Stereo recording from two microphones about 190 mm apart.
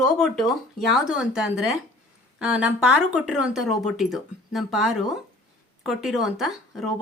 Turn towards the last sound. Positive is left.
turn(degrees=0)  # may be behind; listen again after turning